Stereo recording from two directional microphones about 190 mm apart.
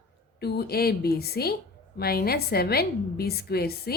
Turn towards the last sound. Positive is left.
turn(degrees=55)  # may be behind; listen again after turning